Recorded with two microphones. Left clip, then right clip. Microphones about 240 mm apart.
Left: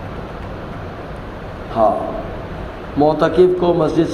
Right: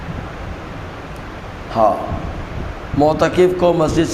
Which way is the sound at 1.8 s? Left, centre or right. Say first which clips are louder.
Right 1 dB; right.